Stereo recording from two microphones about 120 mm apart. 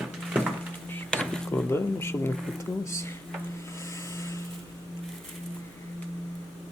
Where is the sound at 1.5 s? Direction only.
20° left (ahead or behind).